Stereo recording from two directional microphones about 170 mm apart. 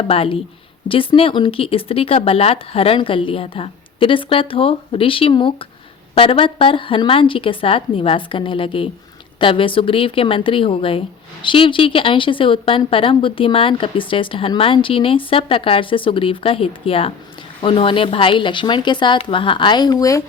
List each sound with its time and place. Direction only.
0.1 s a woman's voice: 35° left (ahead or behind)